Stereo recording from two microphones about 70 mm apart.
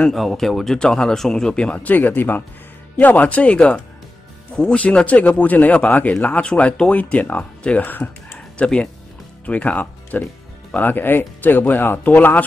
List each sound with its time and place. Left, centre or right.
0.1 s speech: centre; by 12.4 s left